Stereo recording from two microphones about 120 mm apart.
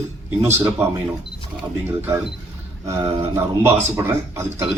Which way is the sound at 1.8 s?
20° right (ahead or behind).